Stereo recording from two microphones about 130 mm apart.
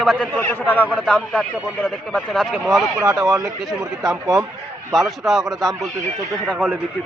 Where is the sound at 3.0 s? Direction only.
25° right (ahead or behind).